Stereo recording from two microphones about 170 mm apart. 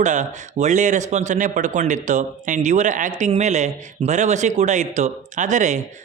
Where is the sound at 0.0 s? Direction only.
45° right (ahead or behind).